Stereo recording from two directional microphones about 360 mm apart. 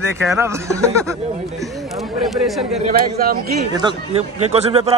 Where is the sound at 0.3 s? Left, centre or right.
Centre.